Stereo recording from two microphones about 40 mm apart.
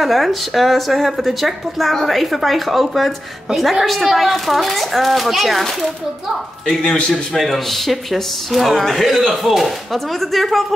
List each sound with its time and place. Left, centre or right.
0.0 s a woman's voice: centre
6.8 s a man's voice: left
7.3 s a woman's voice: centre